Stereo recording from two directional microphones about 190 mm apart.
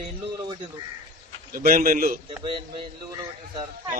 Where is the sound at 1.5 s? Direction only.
50° right (ahead or behind).